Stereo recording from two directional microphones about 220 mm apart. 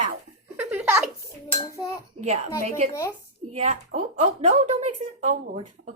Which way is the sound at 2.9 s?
15° left (ahead or behind).